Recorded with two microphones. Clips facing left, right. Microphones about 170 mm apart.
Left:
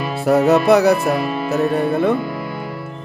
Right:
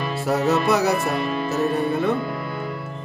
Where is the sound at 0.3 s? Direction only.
60° left (ahead or behind).